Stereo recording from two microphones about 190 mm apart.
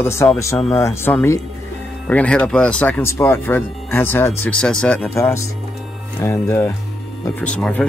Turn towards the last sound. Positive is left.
turn(degrees=5)  # may be behind; listen again after turning